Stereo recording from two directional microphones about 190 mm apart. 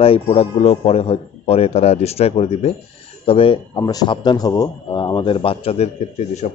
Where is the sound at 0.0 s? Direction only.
30° left (ahead or behind).